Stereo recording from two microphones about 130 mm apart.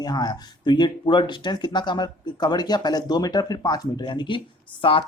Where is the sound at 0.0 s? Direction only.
30° left (ahead or behind).